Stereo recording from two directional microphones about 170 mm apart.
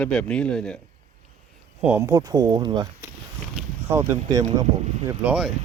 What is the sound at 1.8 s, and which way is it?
Speech, 15° right (ahead or behind).